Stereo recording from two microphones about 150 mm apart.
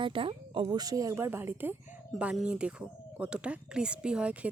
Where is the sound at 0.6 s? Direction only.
25° right (ahead or behind).